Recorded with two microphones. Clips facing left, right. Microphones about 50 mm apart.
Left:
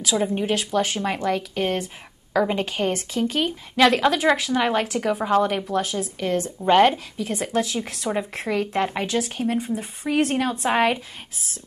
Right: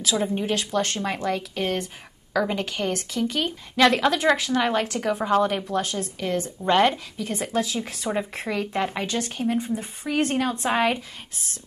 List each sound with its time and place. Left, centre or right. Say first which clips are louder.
0.0 s a woman's voice: left 2 dB; centre